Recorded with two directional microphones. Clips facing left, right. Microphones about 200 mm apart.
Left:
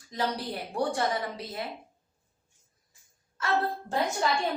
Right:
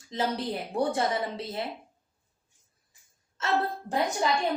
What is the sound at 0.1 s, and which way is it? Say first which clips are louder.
A woman's voice: right 2 dB; 25° right (ahead or behind).